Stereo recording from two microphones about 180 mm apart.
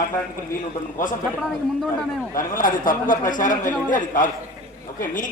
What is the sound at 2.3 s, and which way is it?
A man's voice, 50° left (ahead or behind).